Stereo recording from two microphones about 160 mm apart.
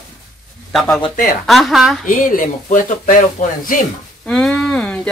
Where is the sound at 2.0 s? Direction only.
55° left (ahead or behind).